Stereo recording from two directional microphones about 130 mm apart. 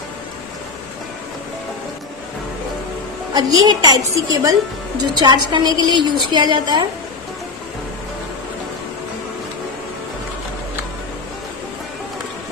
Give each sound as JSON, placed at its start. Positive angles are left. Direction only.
{"t": 3.3, "sound": "a woman's voice", "side_deg": -30}